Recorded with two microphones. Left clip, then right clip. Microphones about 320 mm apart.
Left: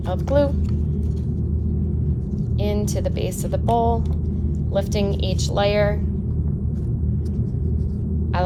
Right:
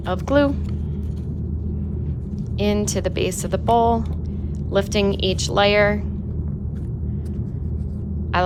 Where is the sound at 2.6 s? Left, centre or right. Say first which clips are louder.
Right 4 dB; right.